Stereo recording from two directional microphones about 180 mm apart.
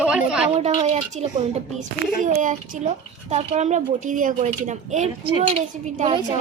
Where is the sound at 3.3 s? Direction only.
35° right (ahead or behind).